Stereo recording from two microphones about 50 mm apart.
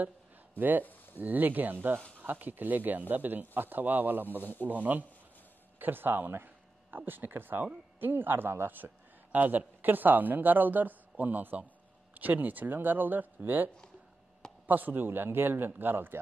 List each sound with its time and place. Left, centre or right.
0.6 s a man's voice: right
14.7 s a man's voice: right